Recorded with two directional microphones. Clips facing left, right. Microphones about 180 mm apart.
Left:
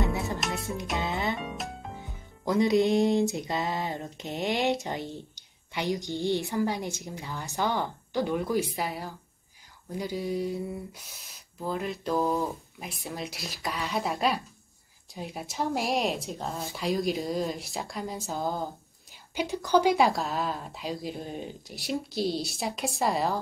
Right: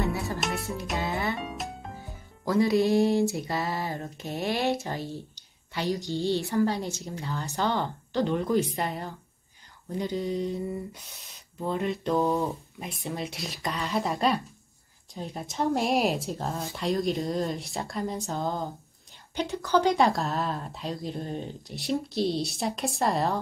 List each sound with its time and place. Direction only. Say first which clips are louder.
0.0 s music: even; 20° left (ahead or behind)
0.9 s speech: right 1 dB; 20° left (ahead or behind)
2.4 s music: even; 20° left (ahead or behind)
5.7 s a woman's voice: right 1 dB; 15° left (ahead or behind); by 23.4 s centre (ahead or behind)